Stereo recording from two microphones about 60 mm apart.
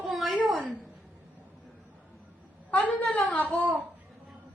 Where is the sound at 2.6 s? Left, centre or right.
Left.